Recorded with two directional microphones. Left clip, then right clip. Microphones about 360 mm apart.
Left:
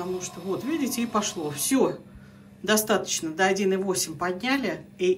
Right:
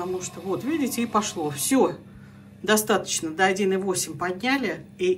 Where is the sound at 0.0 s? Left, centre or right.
Centre.